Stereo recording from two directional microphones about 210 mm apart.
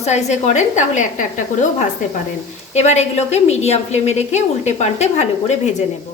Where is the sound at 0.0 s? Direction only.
35° left (ahead or behind).